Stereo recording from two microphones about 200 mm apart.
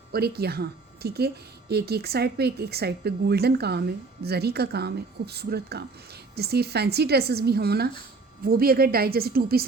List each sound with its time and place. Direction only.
0.1 s speech: 50° right (ahead or behind)